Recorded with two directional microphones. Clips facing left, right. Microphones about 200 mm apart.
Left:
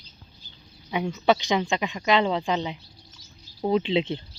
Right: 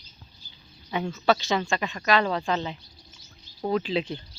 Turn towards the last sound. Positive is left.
turn(degrees=25)  # may be behind; listen again after turning